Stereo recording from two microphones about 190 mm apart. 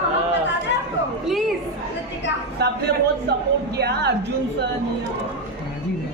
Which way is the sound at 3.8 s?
60° right (ahead or behind).